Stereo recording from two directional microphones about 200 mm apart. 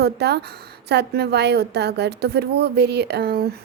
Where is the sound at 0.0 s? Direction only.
55° right (ahead or behind).